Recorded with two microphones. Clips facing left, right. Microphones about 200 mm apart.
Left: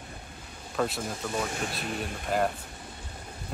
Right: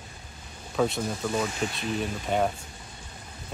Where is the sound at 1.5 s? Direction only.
50° left (ahead or behind).